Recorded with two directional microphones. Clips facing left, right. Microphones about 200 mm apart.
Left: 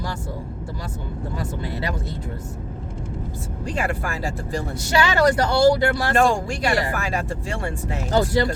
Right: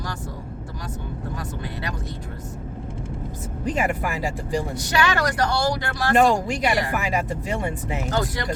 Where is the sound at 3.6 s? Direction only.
20° right (ahead or behind).